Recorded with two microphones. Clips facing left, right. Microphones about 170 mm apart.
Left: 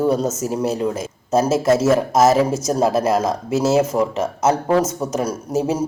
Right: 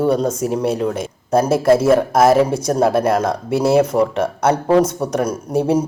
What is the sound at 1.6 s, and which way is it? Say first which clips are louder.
Speech: right 5 dB; 30° right (ahead or behind).